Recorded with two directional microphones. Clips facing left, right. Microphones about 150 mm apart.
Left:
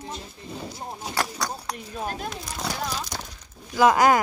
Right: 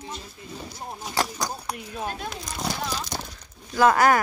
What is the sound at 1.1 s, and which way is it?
Speech, 20° right (ahead or behind).